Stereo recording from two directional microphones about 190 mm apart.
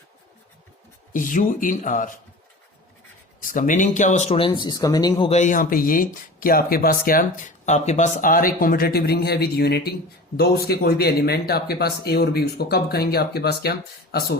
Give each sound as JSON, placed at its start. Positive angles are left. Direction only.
{"t": 1.1, "sound": "speech", "side_deg": 45}
{"t": 3.5, "sound": "speech", "side_deg": 40}
{"t": 5.3, "sound": "speech", "side_deg": 40}